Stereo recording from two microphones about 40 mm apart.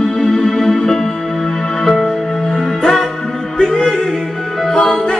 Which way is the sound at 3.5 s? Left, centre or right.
Centre.